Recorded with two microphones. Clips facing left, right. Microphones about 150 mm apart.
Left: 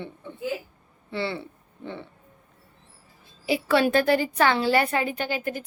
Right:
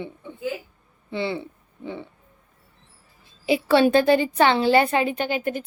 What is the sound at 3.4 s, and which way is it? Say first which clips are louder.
A woman's voice: right 4 dB; 25° right (ahead or behind).